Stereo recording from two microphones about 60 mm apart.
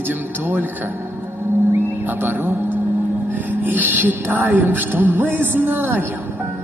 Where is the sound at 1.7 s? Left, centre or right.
Right.